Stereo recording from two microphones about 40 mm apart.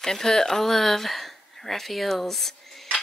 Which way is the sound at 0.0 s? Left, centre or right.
Centre.